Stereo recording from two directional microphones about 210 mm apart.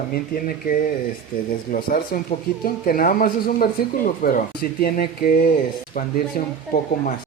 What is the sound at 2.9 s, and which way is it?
Speech, 40° left (ahead or behind).